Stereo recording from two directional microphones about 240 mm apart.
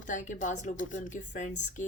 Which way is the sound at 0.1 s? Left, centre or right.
Left.